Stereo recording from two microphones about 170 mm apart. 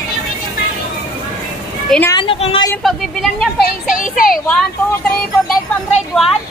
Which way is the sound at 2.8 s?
Centre (ahead or behind).